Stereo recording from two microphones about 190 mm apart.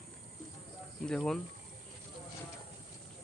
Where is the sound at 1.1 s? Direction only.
5° left (ahead or behind).